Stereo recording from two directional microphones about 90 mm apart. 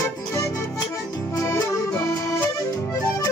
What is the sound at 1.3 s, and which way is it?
Accordion, 40° left (ahead or behind).